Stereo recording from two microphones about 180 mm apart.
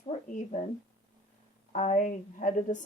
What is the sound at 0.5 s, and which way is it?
Speech, 40° left (ahead or behind).